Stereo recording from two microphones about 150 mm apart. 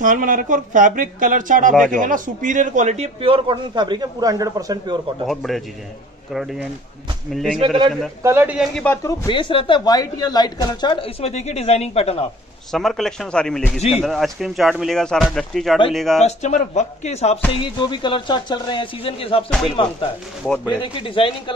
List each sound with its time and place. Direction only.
0.0 s a man's voice: 60° right (ahead or behind); by 5.0 s 25° right (ahead or behind)
5.2 s speech: centre (ahead or behind)
7.6 s a man's voice: 30° right (ahead or behind)
8.2 s a man's voice: 15° right (ahead or behind)
8.8 s speech: 20° left (ahead or behind); by 12.3 s 40° left (ahead or behind)
12.7 s speech: centre (ahead or behind)
16.2 s speech: 50° left (ahead or behind)
17.5 s speech: 30° left (ahead or behind)